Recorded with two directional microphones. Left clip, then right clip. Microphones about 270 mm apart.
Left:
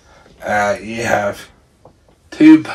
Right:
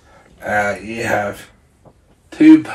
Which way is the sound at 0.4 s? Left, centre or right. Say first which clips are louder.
Left 2 dB; centre.